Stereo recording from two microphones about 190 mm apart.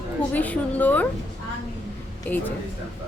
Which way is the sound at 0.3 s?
10° left (ahead or behind).